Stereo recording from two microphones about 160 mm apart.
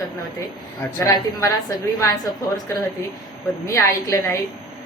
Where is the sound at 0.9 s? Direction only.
25° left (ahead or behind).